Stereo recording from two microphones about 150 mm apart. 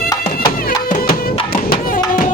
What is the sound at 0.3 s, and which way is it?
Music, 80° left.